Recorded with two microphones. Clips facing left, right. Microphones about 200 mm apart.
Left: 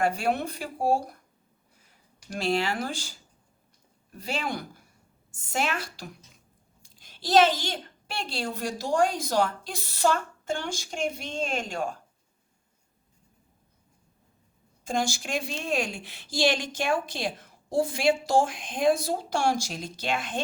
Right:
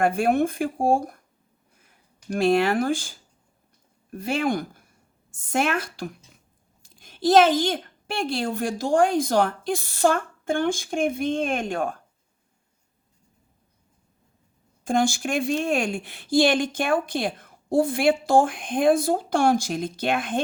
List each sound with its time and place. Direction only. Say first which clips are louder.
0.0 s speech: right 6 dB; 50° right (ahead or behind)
2.2 s speech: right 7 dB; 55° right (ahead or behind)
14.8 s speech: right 6 dB; 55° right (ahead or behind)